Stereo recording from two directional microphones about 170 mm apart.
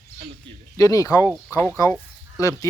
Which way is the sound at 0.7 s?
20° left (ahead or behind).